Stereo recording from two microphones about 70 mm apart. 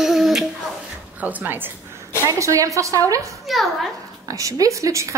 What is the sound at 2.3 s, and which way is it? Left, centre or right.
A woman's voice, right.